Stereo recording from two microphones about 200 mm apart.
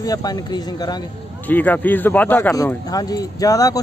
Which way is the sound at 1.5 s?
10° left (ahead or behind).